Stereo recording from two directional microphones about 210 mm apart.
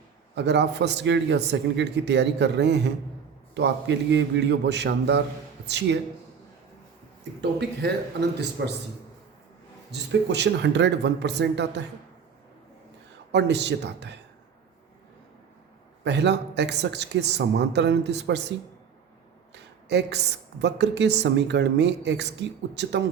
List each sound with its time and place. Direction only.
0.3 s speech: 55° right (ahead or behind)
8.4 s speech: 55° right (ahead or behind)
9.9 s speech: 55° right (ahead or behind)
13.3 s speech: 55° right (ahead or behind)
16.0 s speech: 55° right (ahead or behind)
19.9 s speech: 55° right (ahead or behind)